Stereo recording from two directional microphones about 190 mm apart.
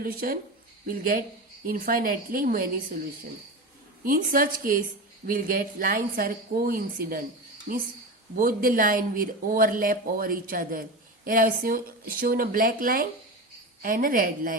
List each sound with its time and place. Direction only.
0.0 s a woman's voice: 50° right (ahead or behind)
4.0 s a woman's voice: 45° right (ahead or behind)